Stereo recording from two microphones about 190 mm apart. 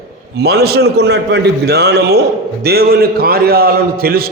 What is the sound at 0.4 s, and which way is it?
A man's voice, 55° right (ahead or behind).